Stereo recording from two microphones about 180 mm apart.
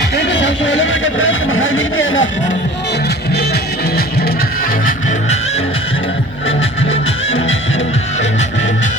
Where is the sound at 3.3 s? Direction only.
60° left (ahead or behind).